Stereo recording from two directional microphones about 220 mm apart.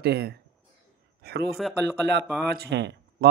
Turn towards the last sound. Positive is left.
turn(degrees=-50)  # may be behind; listen again after turning